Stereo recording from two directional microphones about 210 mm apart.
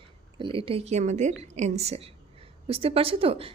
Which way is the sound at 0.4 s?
25° right (ahead or behind).